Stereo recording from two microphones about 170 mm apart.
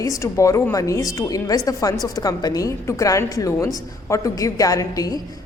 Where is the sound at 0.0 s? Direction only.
20° left (ahead or behind).